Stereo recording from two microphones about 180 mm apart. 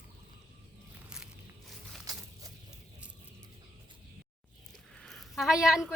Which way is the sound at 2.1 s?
20° right (ahead or behind).